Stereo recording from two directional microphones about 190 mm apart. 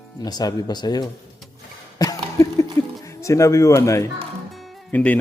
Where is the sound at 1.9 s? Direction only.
20° left (ahead or behind).